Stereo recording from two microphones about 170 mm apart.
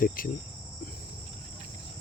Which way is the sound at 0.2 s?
55° left (ahead or behind).